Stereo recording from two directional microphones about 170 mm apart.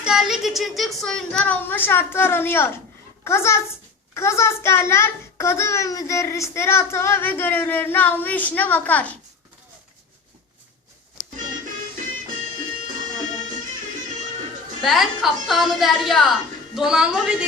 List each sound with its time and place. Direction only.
0.0 s a child's voice: 5° right (ahead or behind)
14.8 s a woman's voice: centre (ahead or behind)